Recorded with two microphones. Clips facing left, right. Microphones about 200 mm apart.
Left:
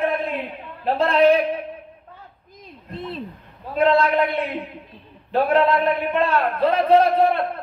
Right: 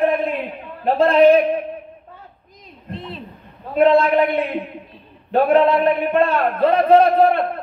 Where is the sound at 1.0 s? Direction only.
15° right (ahead or behind).